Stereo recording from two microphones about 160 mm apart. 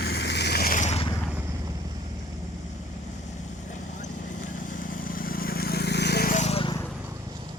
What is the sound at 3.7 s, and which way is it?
Vehicle, 50° left (ahead or behind).